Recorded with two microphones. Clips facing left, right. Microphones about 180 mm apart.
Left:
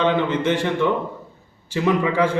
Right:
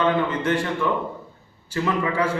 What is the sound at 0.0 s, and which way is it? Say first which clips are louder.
Speech: left 2 dB; 25° left (ahead or behind).